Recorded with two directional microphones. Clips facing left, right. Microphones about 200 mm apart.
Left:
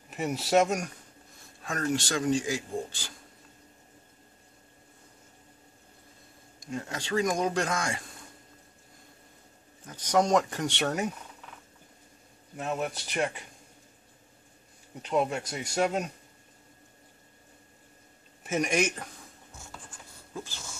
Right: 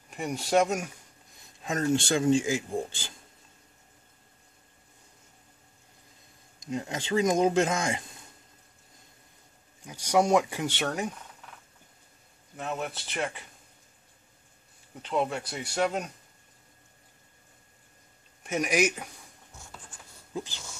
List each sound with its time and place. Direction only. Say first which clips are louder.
0.1 s speech: left 1 dB; 5° left (ahead or behind)
1.6 s speech: right 3 dB; 25° right (ahead or behind)
6.6 s speech: right 3 dB; 20° right (ahead or behind)
9.8 s speech: right 1 dB; 10° right (ahead or behind)
12.5 s speech: left 2 dB; 5° left (ahead or behind)
15.0 s speech: left 1 dB; 10° left (ahead or behind)
18.4 s speech: right 1 dB; centre (ahead or behind)